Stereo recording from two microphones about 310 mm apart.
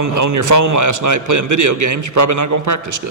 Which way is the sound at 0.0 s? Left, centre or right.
Right.